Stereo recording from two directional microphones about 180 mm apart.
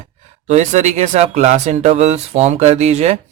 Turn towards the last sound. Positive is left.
turn(degrees=-35)  # may be behind; listen again after turning